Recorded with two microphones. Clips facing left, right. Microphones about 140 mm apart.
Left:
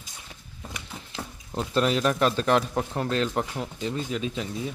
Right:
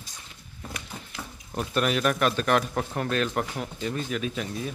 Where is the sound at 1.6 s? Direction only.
25° left (ahead or behind).